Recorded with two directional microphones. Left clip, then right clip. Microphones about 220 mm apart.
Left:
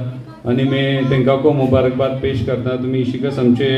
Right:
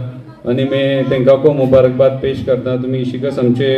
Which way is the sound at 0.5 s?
45° right (ahead or behind).